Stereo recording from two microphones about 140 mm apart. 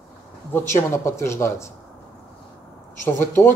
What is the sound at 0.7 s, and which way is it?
Speech, 20° left (ahead or behind).